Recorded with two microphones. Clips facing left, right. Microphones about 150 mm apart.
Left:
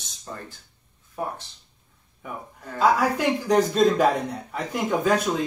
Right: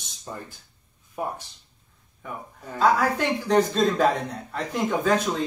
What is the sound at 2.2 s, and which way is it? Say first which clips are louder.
Speech: even; 5° left (ahead or behind).